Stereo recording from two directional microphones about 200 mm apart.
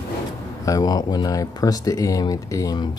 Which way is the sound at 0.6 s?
20° left (ahead or behind).